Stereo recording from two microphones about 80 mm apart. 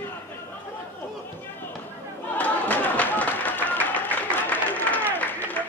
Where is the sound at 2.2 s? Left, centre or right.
Left.